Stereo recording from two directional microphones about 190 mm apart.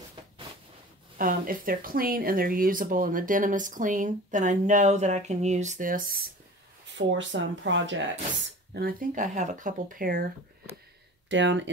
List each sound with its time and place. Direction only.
1.1 s speech: 45° right (ahead or behind)
7.0 s speech: 75° right (ahead or behind)
8.7 s speech: 45° right (ahead or behind)
11.2 s speech: 70° right (ahead or behind)